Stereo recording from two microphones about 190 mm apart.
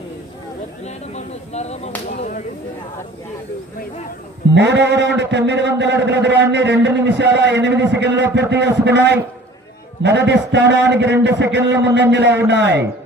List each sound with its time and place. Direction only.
0.9 s a sound: 35° left (ahead or behind)
2.0 s whip: 45° left (ahead or behind)
4.5 s a man's voice: 65° right (ahead or behind)